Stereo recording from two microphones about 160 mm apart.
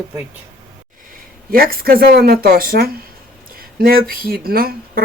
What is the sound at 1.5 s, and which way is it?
Speech, 65° right (ahead or behind).